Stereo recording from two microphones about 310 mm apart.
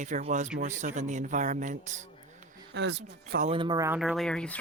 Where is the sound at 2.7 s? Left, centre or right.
Right; by 4.6 s centre.